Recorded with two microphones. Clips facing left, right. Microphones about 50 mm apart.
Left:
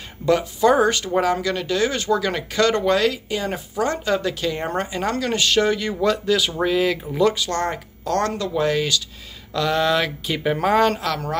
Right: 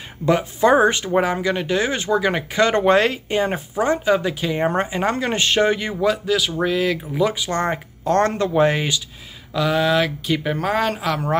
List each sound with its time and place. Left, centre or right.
0.2 s speech: right
5.9 s speech: centre
7.2 s speech: centre
9.5 s speech: centre